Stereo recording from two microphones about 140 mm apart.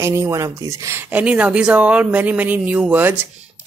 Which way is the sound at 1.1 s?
10° right (ahead or behind).